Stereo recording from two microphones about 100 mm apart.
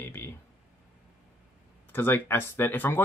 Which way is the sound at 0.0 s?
25° left (ahead or behind).